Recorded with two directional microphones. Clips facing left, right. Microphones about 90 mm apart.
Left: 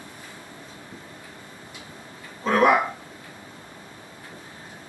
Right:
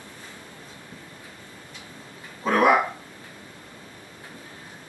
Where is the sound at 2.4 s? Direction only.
5° right (ahead or behind).